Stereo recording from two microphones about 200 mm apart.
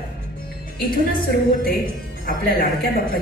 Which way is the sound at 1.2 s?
50° left (ahead or behind).